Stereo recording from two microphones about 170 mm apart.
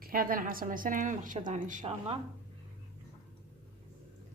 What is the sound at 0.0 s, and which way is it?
A woman's voice, 55° right (ahead or behind).